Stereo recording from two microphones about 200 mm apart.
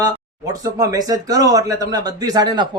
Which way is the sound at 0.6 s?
15° right (ahead or behind).